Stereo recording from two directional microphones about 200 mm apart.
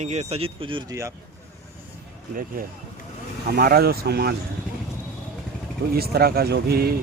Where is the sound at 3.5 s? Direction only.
50° right (ahead or behind).